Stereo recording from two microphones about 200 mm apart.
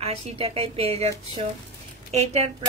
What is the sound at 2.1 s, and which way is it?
Speech, 30° right (ahead or behind).